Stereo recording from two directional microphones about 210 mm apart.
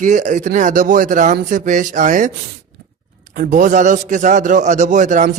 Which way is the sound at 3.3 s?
40° right (ahead or behind).